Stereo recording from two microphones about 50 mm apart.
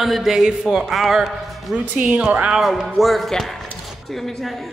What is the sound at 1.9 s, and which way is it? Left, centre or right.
Speech, right.